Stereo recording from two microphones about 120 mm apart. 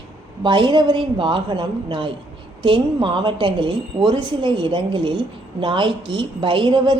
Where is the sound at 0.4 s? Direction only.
40° right (ahead or behind).